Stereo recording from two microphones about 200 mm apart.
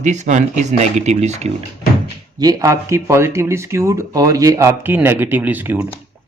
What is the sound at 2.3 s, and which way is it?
Speech, 20° right (ahead or behind).